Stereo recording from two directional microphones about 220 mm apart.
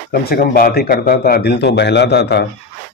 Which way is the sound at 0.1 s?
45° left (ahead or behind).